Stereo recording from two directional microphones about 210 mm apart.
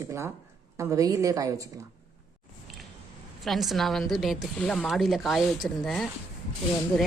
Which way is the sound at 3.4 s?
Centre (ahead or behind).